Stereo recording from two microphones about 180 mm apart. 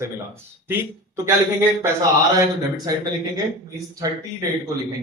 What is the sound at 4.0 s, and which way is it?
Speech, 20° right (ahead or behind).